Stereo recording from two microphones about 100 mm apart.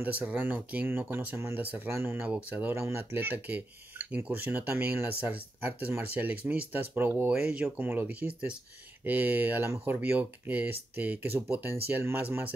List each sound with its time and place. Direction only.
0.0 s speech: 15° right (ahead or behind)
7.3 s speech: 10° right (ahead or behind)